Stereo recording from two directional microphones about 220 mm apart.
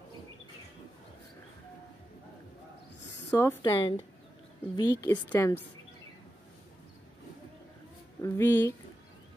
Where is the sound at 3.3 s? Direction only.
10° left (ahead or behind).